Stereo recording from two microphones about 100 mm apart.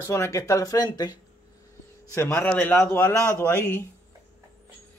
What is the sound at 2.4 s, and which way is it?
Speech, 15° left (ahead or behind).